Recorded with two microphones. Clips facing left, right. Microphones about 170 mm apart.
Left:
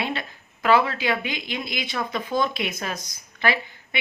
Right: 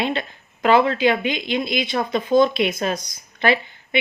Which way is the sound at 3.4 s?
25° right (ahead or behind).